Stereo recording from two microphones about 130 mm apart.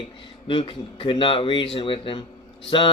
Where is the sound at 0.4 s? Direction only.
40° left (ahead or behind).